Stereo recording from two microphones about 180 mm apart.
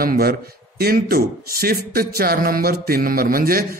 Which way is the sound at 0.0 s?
55° right (ahead or behind).